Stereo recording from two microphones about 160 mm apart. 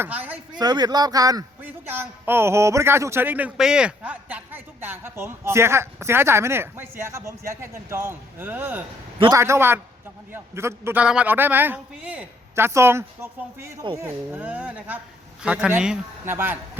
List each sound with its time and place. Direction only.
0.0 s a man's voice: 10° right (ahead or behind)
0.5 s speech: 25° right (ahead or behind)
1.6 s a man's voice: 15° right (ahead or behind)